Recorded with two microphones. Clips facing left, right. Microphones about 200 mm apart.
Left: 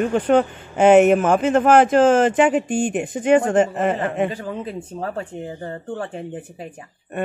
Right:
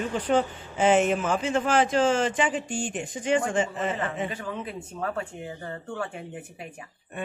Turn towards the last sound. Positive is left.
turn(degrees=35)  # may be behind; listen again after turning